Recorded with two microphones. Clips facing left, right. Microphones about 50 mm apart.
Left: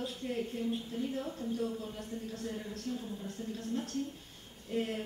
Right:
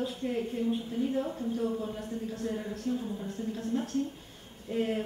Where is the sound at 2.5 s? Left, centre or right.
Centre.